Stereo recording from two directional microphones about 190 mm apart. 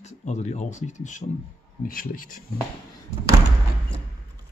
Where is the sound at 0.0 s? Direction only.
40° left (ahead or behind).